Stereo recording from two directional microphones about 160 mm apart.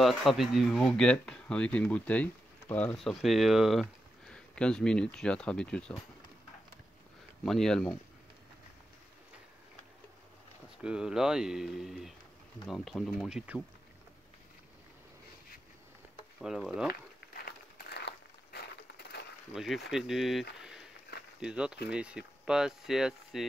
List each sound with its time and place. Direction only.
0.0 s speech: centre (ahead or behind)
7.4 s speech: 5° left (ahead or behind)
10.8 s speech: 5° right (ahead or behind)
16.3 s speech: centre (ahead or behind)
17.3 s a sound: 70° left (ahead or behind); by 19.2 s 90° left
19.5 s speech: centre (ahead or behind)
20.6 s a sound: 5° right (ahead or behind)
21.4 s speech: 5° right (ahead or behind)